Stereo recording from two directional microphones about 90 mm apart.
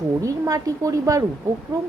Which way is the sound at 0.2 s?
40° right (ahead or behind).